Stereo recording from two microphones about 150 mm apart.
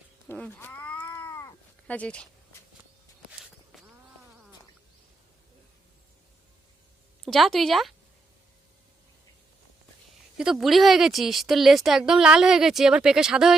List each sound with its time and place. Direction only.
0.3 s cat: 10° left (ahead or behind)
1.3 s cat: 25° left (ahead or behind)
1.9 s speech: 10° left (ahead or behind)
7.3 s speech: centre (ahead or behind)
10.3 s speech: 5° right (ahead or behind)